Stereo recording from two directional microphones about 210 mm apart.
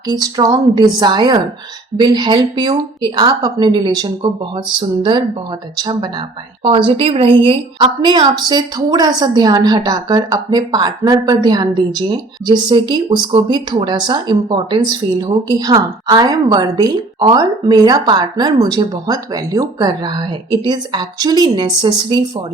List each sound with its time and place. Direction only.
0.1 s a woman's voice: 20° right (ahead or behind)